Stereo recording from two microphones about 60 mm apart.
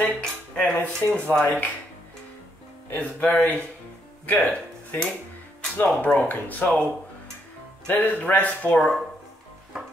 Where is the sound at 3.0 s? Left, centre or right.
Left.